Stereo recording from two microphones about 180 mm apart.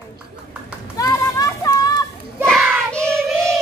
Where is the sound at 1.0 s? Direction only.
20° left (ahead or behind).